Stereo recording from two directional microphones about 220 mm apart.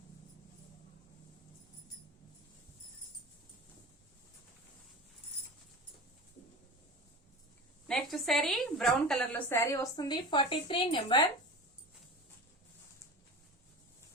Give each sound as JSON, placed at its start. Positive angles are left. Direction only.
{"t": 7.9, "sound": "a woman's voice", "side_deg": 0}